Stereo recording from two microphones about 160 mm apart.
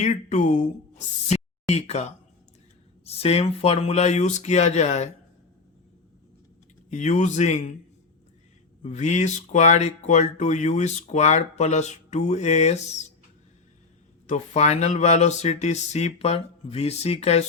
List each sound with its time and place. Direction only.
0.0 s speech: 50° left (ahead or behind)
6.9 s speech: 50° left (ahead or behind)
8.8 s speech: 45° left (ahead or behind)
14.3 s speech: 45° left (ahead or behind)